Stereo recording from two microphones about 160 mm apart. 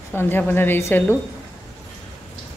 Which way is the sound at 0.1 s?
15° left (ahead or behind).